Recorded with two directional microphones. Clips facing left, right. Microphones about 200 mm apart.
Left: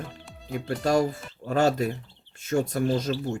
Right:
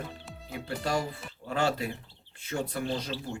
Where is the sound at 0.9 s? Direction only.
45° left (ahead or behind).